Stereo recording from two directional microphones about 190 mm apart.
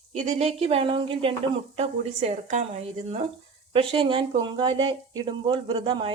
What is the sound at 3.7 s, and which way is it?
Speech, 30° right (ahead or behind).